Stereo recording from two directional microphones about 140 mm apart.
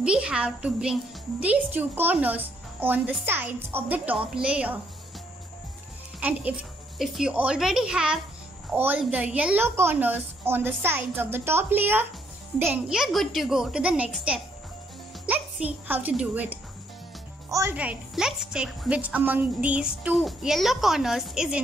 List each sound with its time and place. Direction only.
0.0 s speech: 5° right (ahead or behind)
6.1 s a woman's voice: 10° right (ahead or behind)
17.5 s speech: 20° right (ahead or behind)
17.7 s a woman's voice: 5° right (ahead or behind)